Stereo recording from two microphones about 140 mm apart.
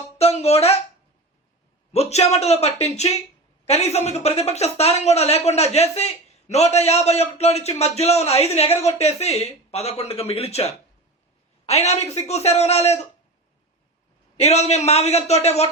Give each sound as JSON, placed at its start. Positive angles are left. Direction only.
{"t": 0.2, "sound": "speech", "side_deg": 45}
{"t": 1.9, "sound": "speech", "side_deg": 50}
{"t": 14.3, "sound": "speech", "side_deg": 50}